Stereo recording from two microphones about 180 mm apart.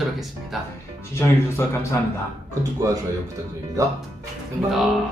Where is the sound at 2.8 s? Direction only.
15° right (ahead or behind).